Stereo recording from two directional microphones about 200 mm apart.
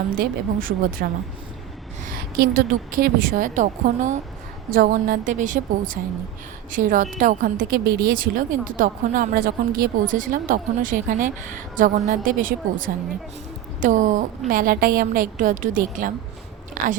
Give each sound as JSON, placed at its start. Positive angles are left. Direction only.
{"t": 0.1, "sound": "a woman's voice", "side_deg": -45}
{"t": 2.0, "sound": "a woman's voice", "side_deg": -50}